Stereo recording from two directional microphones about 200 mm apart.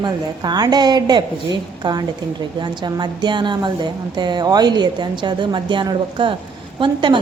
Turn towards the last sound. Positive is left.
turn(degrees=-25)  # may be behind; listen again after turning